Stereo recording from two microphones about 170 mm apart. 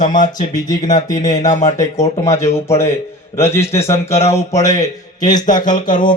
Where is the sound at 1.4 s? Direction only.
50° left (ahead or behind).